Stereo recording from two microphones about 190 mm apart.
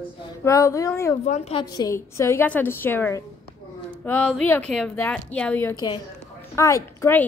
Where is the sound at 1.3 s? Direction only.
30° left (ahead or behind).